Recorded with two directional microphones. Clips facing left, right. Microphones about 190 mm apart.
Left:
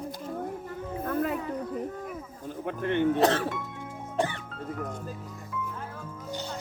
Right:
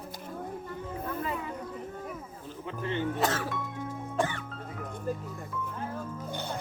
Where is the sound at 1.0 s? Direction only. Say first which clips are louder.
Left 7 dB; 55° left (ahead or behind).